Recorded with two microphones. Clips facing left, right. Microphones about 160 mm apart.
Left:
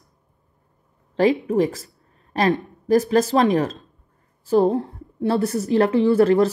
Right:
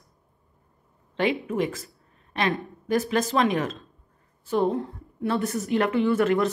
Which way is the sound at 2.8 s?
40° left (ahead or behind).